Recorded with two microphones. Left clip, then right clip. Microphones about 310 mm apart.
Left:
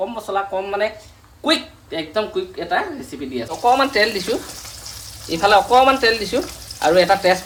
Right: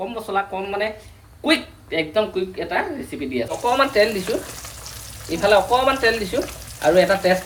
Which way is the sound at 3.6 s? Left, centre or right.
Left.